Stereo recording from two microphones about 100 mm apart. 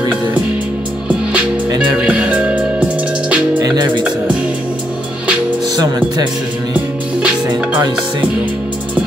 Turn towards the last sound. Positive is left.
turn(degrees=-10)  # may be behind; listen again after turning